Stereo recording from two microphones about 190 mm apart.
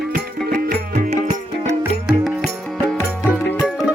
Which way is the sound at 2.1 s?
Centre (ahead or behind).